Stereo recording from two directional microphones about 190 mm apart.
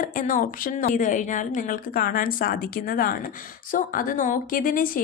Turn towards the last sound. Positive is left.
turn(degrees=45)  # may be behind; listen again after turning